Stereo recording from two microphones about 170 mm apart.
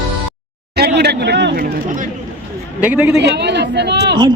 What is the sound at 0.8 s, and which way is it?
Speech, 75° right (ahead or behind).